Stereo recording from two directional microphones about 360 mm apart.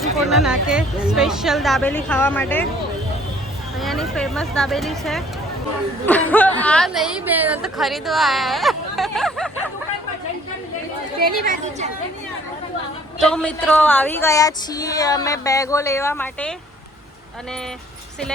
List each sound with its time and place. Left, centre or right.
0.0 s a woman's voice: centre
3.8 s a woman's voice: centre
11.2 s speech: right
13.1 s speech: centre